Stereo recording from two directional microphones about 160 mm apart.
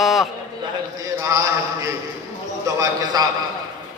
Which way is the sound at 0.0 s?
Centre (ahead or behind).